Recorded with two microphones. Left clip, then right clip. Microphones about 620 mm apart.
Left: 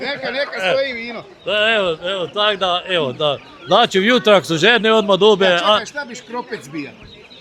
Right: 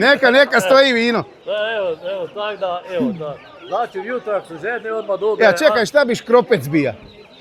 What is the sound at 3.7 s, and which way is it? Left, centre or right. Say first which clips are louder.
A man's voice: left 8 dB; left.